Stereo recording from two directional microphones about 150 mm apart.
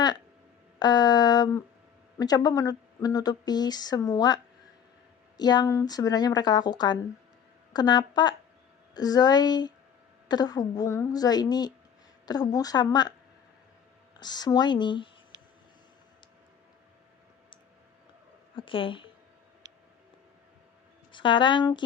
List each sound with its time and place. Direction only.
0.8 s speech: 25° left (ahead or behind)
5.4 s speech: 25° left (ahead or behind)
14.2 s speech: 30° left (ahead or behind)
18.5 s a woman's voice: 35° left (ahead or behind)
21.1 s speech: 35° left (ahead or behind)